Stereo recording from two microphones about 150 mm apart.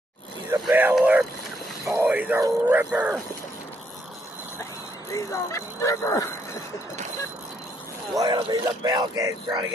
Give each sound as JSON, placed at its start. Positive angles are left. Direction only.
{"t": 0.5, "sound": "a sound", "side_deg": -10}
{"t": 0.9, "sound": "speech", "side_deg": -10}
{"t": 5.1, "sound": "speech", "side_deg": 20}
{"t": 8.2, "sound": "speech", "side_deg": -30}